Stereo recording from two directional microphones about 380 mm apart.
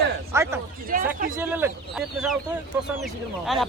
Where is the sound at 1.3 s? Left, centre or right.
Centre.